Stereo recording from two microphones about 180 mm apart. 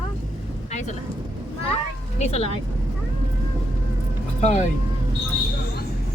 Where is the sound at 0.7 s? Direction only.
40° left (ahead or behind).